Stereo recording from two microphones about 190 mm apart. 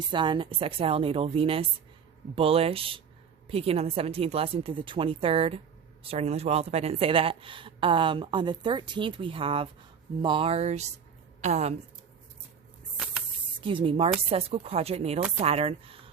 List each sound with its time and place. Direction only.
0.1 s a woman's voice: 25° right (ahead or behind)
13.6 s speech: 25° right (ahead or behind)